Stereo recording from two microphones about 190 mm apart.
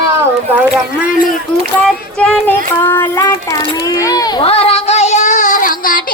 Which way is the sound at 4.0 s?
20° left (ahead or behind).